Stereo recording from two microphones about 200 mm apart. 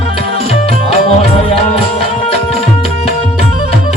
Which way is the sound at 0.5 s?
30° left (ahead or behind).